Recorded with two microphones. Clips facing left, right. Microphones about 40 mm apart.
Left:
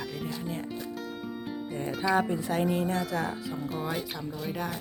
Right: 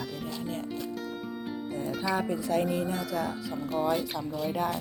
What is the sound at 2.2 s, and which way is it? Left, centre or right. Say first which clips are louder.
Speech: even; left.